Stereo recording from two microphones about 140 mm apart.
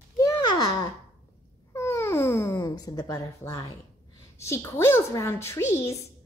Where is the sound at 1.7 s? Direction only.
20° left (ahead or behind).